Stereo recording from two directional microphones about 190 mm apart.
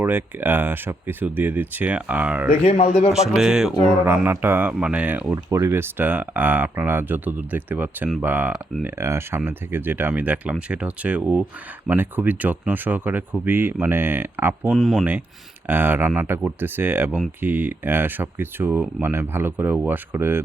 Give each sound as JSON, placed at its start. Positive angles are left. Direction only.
{"t": 0.0, "sound": "speech", "side_deg": -10}
{"t": 2.6, "sound": "speech", "side_deg": 35}
{"t": 3.1, "sound": "speech", "side_deg": -5}